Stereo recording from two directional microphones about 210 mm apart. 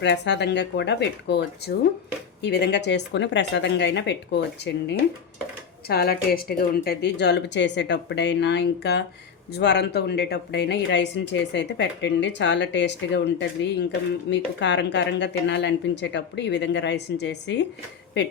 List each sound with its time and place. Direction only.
0.0 s a woman's voice: 55° left (ahead or behind)